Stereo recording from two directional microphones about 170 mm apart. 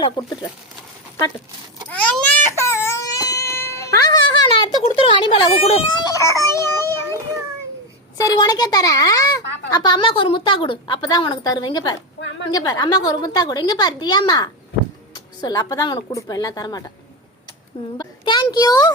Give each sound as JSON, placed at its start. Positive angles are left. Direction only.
{"t": 0.0, "sound": "a woman's voice", "side_deg": 25}
{"t": 1.9, "sound": "baby cry", "side_deg": 10}
{"t": 4.9, "sound": "speech", "side_deg": 30}
{"t": 6.1, "sound": "a child's voice", "side_deg": 20}
{"t": 8.2, "sound": "a woman's voice", "side_deg": 20}
{"t": 17.9, "sound": "a child's voice", "side_deg": 25}